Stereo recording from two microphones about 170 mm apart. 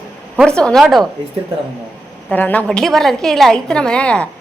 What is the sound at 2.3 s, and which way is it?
A woman's voice, 10° left (ahead or behind).